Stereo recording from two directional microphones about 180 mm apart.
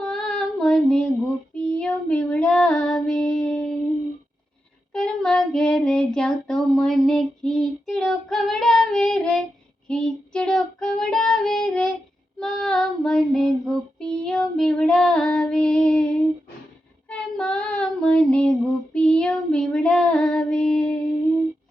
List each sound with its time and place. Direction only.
0.0 s child singing: centre (ahead or behind)
4.9 s child singing: 5° left (ahead or behind)